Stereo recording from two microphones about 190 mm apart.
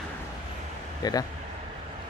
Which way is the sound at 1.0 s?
20° left (ahead or behind).